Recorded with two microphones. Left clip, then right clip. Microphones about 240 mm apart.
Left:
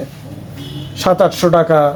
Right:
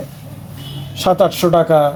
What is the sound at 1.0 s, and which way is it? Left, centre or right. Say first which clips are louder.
Speech: left 1 dB; centre.